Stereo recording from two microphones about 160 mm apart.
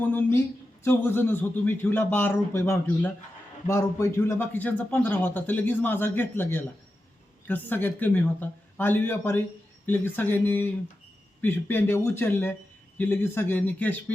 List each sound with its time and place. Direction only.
0.1 s a man's voice: 15° left (ahead or behind)